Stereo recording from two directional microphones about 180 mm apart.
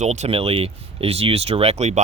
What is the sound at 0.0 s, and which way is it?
Speech, 40° right (ahead or behind).